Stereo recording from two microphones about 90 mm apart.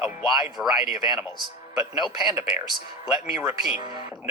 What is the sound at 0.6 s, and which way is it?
A woman's voice, centre (ahead or behind).